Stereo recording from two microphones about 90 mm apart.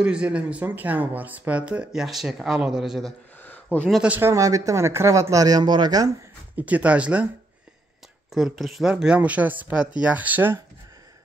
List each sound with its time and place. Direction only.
0.0 s speech: 10° right (ahead or behind)
4.2 s speech: 35° right (ahead or behind)
6.5 s speech: 15° right (ahead or behind)
8.3 s speech: centre (ahead or behind); by 10.6 s 20° right (ahead or behind)